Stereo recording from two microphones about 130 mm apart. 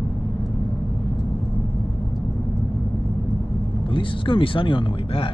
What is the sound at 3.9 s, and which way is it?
Speech, 40° left (ahead or behind).